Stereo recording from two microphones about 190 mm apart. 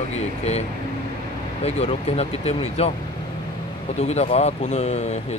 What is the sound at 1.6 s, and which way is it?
Speech, 35° left (ahead or behind).